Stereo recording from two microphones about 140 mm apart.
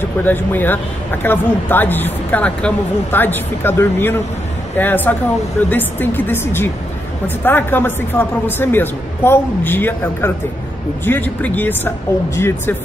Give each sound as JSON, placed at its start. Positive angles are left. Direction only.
{"t": 0.2, "sound": "speech", "side_deg": 15}